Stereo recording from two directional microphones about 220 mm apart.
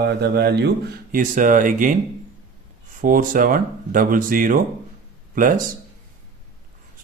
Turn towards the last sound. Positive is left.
turn(degrees=-40)  # may be behind; listen again after turning